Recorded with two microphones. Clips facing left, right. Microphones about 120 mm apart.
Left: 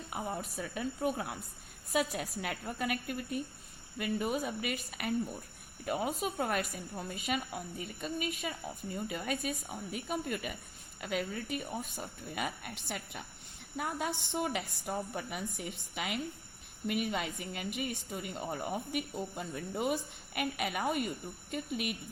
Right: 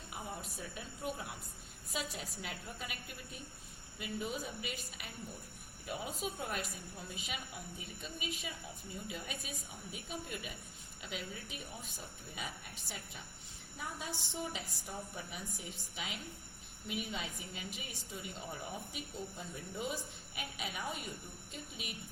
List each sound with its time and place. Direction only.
0.1 s a woman's voice: 60° left (ahead or behind)